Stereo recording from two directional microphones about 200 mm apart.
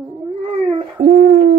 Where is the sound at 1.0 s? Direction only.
50° right (ahead or behind).